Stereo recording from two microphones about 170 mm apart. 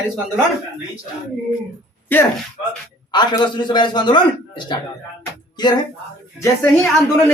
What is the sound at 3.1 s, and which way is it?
A man's voice, 25° left (ahead or behind).